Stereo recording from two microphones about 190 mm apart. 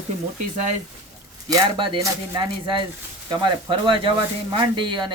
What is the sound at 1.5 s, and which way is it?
Speech, 25° right (ahead or behind).